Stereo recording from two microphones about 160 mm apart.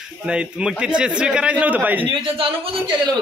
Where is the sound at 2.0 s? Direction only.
35° right (ahead or behind).